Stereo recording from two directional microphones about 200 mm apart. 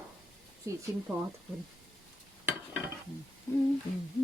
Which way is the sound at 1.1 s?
Centre (ahead or behind).